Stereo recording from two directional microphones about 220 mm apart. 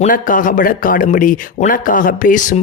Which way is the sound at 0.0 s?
35° left (ahead or behind).